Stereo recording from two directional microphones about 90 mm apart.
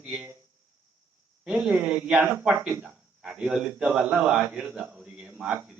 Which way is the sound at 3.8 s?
15° right (ahead or behind).